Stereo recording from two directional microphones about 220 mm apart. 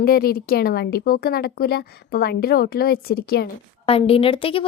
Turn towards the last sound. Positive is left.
turn(degrees=25)  # may be behind; listen again after turning